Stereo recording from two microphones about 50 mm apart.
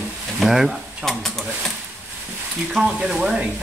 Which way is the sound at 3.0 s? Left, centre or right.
Centre.